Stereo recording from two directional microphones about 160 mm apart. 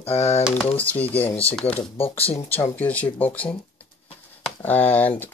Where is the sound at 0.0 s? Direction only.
40° left (ahead or behind).